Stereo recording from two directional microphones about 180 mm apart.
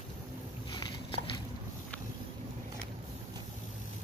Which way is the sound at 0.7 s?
25° left (ahead or behind).